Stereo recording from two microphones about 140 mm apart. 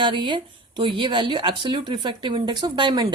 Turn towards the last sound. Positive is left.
turn(degrees=-35)  # may be behind; listen again after turning